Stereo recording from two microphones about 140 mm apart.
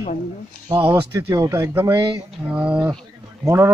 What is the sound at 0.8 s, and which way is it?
A man's voice, 25° right (ahead or behind).